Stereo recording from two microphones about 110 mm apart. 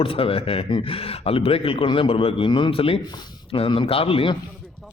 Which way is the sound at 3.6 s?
55° left (ahead or behind).